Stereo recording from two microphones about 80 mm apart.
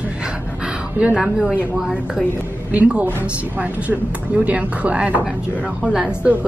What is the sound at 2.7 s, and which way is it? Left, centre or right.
Speech, centre.